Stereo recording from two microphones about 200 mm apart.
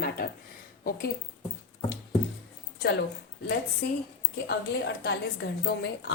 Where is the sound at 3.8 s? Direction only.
55° left (ahead or behind).